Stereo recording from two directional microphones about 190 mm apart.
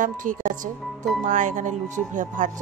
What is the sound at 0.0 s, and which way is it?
Speech, 45° right (ahead or behind).